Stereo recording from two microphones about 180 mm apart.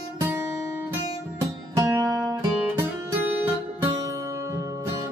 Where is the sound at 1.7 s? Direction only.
20° right (ahead or behind).